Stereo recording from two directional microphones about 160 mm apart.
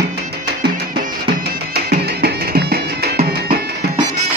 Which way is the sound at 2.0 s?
75° right (ahead or behind).